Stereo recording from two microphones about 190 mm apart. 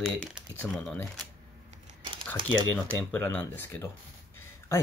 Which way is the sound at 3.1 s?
10° left (ahead or behind).